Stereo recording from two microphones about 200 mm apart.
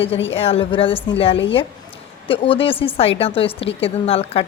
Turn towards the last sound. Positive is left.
turn(degrees=30)  # may be behind; listen again after turning